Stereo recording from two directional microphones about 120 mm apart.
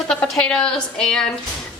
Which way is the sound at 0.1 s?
10° left (ahead or behind).